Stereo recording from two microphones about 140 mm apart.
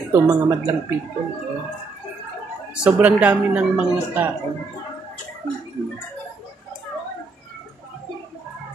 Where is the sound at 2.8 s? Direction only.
10° right (ahead or behind).